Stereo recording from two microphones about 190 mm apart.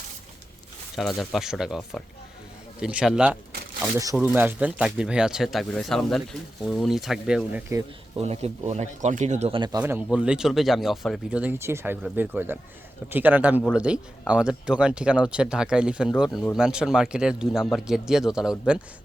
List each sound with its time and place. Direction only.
0.9 s speech: centre (ahead or behind)
3.8 s speech: 15° right (ahead or behind)
7.7 s speech: 15° right (ahead or behind)
8.2 s speech: 35° right (ahead or behind); by 18.5 s 5° right (ahead or behind)